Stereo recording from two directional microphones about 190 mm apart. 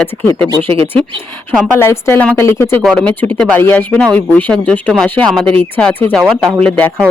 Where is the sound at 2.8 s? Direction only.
Centre (ahead or behind).